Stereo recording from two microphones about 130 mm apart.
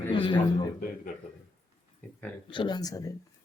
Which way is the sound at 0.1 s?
40° left (ahead or behind).